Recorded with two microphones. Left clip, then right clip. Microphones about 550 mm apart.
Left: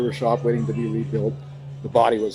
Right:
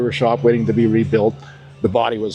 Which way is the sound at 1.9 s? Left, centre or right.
Right.